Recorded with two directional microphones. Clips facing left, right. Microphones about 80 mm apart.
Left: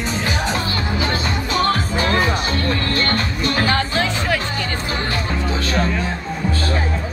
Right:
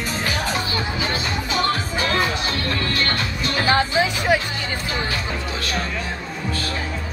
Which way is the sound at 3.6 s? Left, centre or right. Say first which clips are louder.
Right 1 dB; centre.